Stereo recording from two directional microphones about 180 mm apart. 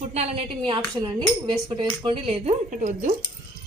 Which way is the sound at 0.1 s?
35° right (ahead or behind).